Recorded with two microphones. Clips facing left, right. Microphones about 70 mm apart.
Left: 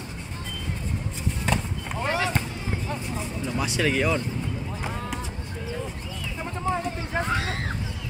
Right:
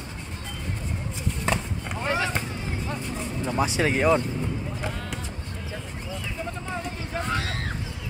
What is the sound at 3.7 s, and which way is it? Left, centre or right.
Speech, right.